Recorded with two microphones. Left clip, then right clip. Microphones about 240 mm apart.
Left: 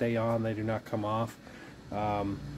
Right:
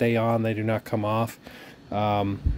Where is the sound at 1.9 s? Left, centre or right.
Right.